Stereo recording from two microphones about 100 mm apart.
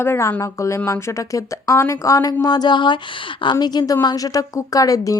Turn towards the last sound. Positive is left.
turn(degrees=35)  # may be behind; listen again after turning